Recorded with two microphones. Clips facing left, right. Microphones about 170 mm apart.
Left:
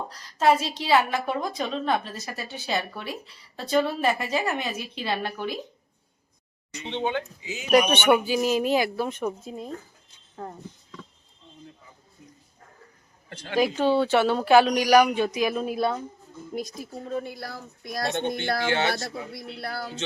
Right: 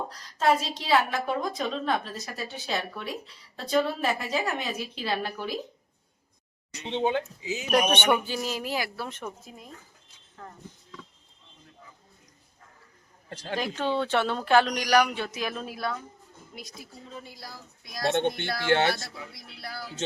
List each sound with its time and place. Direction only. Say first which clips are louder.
0.1 s a woman's voice: left 4 dB; centre (ahead or behind)
6.9 s speech: right 1 dB; 35° right (ahead or behind)
7.7 s speech: left 4 dB; centre (ahead or behind)
9.5 s speech: left 11 dB; 30° left (ahead or behind)
13.3 s speech: right 1 dB; 35° right (ahead or behind)
13.6 s speech: left 7 dB; 10° left (ahead or behind)
15.7 s speech: left 7 dB; 25° left (ahead or behind)
16.6 s speech: left 11 dB; 45° left (ahead or behind)